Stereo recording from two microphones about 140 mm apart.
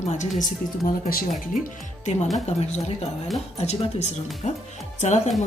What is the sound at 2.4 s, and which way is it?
Speech, 50° left (ahead or behind).